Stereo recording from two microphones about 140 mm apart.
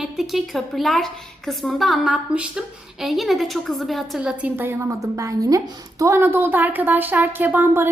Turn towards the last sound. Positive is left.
turn(degrees=-15)  # may be behind; listen again after turning